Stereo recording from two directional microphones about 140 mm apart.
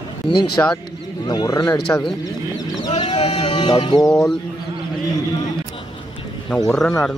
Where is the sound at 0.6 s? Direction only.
15° left (ahead or behind).